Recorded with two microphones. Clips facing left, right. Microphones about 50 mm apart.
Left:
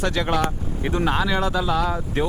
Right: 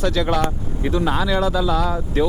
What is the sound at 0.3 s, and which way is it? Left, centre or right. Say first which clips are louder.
Speech: right 2 dB; centre.